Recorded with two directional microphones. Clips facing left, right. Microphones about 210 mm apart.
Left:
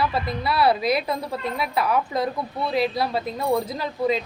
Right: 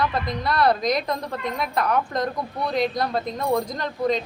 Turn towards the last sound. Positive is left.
turn(degrees=5)  # may be behind; listen again after turning